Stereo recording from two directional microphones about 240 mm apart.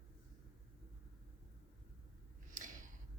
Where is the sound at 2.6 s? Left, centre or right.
Right.